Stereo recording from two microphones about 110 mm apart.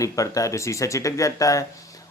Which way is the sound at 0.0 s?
30° left (ahead or behind).